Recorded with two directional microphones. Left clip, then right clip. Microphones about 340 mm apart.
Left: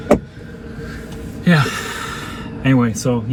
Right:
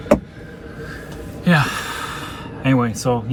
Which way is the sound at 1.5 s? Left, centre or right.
Centre.